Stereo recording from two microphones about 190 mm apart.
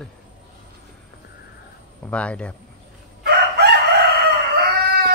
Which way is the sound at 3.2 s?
60° right (ahead or behind).